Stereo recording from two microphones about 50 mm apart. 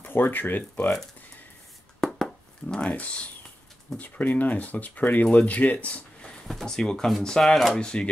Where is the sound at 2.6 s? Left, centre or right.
Centre.